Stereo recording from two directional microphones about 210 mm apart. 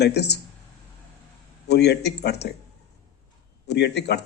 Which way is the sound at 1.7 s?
50° left (ahead or behind).